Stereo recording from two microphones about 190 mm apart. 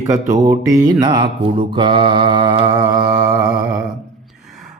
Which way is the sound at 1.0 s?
25° right (ahead or behind).